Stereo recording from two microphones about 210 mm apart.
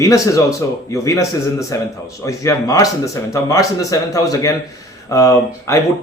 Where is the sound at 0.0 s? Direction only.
15° left (ahead or behind).